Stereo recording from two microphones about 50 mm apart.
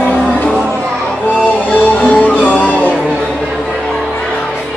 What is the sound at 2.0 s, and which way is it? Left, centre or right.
Music, left.